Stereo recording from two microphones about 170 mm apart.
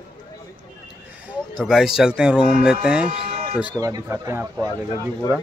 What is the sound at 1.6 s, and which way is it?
Speech, centre (ahead or behind).